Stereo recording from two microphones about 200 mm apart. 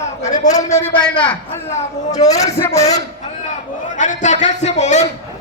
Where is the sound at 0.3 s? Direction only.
35° left (ahead or behind).